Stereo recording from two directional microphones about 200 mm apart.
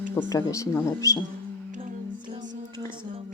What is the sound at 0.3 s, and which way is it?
Speech, 15° left (ahead or behind).